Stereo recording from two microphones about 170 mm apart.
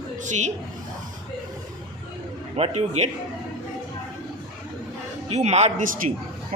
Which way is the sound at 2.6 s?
40° right (ahead or behind).